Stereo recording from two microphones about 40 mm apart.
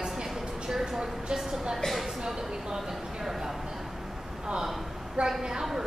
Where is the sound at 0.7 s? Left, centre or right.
Centre.